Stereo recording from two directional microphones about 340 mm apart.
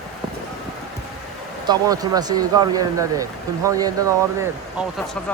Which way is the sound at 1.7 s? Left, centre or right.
Centre.